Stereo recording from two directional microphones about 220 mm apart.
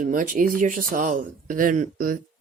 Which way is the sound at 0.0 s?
40° right (ahead or behind).